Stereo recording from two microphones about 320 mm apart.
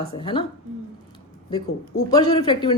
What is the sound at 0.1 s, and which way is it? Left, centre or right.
Speech, centre.